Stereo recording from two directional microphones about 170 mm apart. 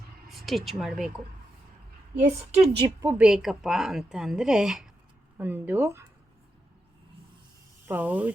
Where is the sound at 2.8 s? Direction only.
20° right (ahead or behind).